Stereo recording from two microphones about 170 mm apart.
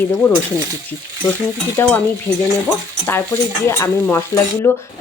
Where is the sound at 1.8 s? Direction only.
15° left (ahead or behind).